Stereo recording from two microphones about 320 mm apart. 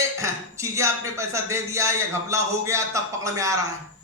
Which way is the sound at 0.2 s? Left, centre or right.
Centre.